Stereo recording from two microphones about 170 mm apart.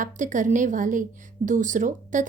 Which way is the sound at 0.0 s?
50° right (ahead or behind).